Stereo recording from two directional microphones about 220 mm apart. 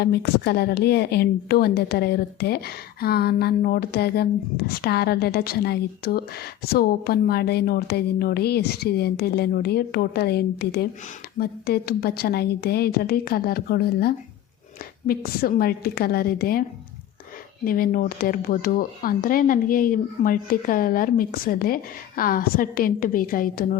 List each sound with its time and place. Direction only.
0.0 s a woman's voice: 45° left (ahead or behind)
17.7 s speech: 40° left (ahead or behind)